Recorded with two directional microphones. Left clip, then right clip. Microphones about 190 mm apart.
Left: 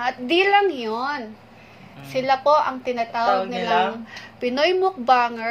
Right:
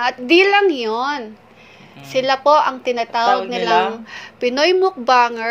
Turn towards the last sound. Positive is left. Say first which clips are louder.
# right 4 dB
turn(degrees=-20)  # may be behind; listen again after turning